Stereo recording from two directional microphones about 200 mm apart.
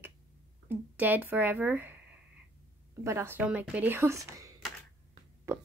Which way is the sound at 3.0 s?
10° right (ahead or behind).